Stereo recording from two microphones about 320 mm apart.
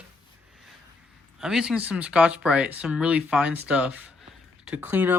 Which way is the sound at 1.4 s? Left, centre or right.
Centre.